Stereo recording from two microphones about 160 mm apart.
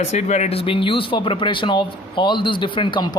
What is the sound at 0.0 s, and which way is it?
Speech, 45° left (ahead or behind).